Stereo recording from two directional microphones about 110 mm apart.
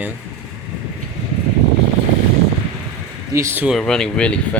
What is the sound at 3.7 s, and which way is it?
Speech, 5° left (ahead or behind).